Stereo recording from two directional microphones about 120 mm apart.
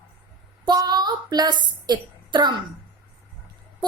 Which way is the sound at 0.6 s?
35° right (ahead or behind).